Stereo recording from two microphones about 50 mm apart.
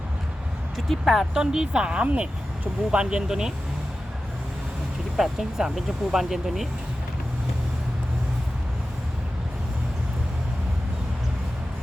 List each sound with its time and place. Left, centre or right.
0.9 s speech: centre
1.3 s speech: centre
5.1 s speech: centre